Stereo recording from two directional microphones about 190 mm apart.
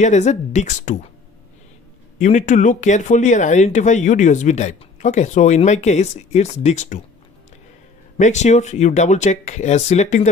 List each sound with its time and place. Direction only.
0.0 s speech: 40° left (ahead or behind)
2.1 s speech: 40° left (ahead or behind)
8.2 s speech: 40° left (ahead or behind)